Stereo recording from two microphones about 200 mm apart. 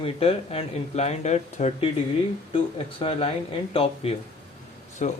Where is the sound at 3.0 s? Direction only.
30° left (ahead or behind).